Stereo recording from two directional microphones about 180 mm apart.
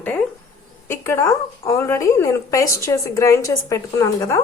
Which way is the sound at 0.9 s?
15° left (ahead or behind).